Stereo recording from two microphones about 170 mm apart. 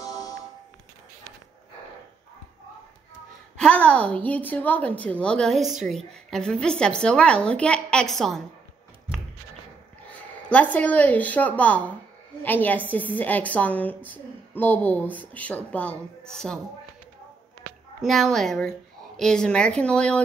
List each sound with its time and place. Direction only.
0.0 s music: 20° left (ahead or behind)
3.5 s a woman's voice: 5° left (ahead or behind)
10.1 s a woman's voice: 10° left (ahead or behind)
18.0 s a woman's voice: centre (ahead or behind)